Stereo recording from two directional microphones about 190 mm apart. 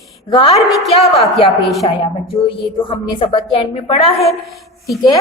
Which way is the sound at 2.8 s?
25° left (ahead or behind).